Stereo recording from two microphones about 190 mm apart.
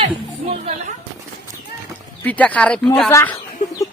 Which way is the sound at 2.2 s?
10° left (ahead or behind).